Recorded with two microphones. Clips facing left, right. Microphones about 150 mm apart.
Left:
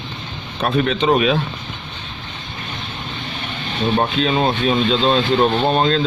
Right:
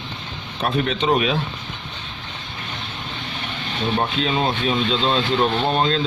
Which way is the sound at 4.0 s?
60° left (ahead or behind).